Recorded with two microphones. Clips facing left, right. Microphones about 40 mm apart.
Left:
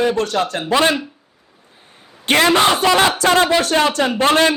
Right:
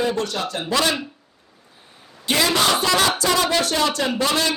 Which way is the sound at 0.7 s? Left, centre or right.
Left.